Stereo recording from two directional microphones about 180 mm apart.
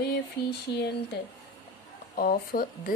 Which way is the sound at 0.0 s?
65° left (ahead or behind).